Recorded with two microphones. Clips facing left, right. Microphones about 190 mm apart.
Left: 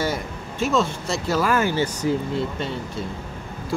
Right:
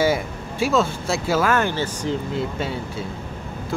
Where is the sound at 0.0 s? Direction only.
5° right (ahead or behind).